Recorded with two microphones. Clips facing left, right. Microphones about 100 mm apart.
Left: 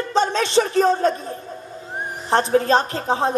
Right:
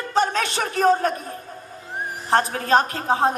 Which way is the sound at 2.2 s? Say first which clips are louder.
Left 4 dB; 25° left (ahead or behind).